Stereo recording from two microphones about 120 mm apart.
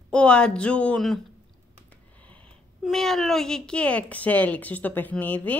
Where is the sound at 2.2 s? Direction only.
10° left (ahead or behind).